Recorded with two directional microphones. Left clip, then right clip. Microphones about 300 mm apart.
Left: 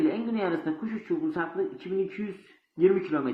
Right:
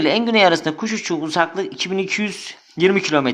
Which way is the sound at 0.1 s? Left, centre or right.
Right.